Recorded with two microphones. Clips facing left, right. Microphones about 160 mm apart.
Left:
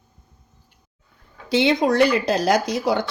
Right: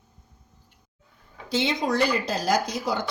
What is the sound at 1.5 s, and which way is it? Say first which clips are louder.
Speech: left 7 dB; 70° left (ahead or behind).